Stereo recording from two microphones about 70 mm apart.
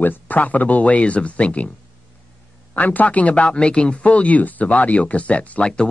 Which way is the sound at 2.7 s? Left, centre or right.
Left.